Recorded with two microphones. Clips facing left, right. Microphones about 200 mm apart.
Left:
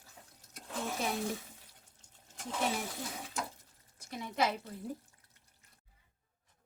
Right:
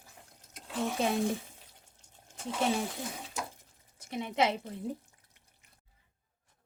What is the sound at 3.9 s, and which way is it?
Speech, 20° right (ahead or behind).